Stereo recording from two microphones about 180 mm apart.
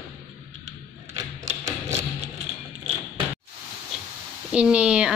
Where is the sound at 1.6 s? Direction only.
15° right (ahead or behind).